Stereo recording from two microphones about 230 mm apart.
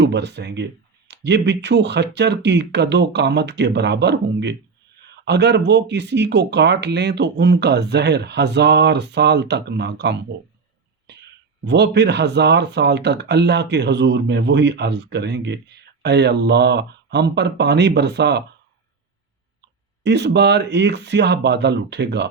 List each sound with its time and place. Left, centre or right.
0.0 s speech: right
11.6 s speech: right
20.1 s speech: right